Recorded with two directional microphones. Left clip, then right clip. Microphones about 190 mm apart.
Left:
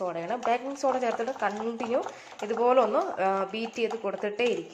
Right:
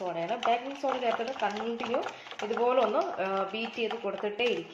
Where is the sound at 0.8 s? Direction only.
30° left (ahead or behind).